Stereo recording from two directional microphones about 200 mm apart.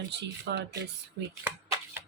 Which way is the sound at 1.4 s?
10° right (ahead or behind).